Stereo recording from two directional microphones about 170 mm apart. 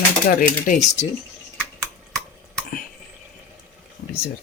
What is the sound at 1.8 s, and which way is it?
Finger snapping, 5° left (ahead or behind).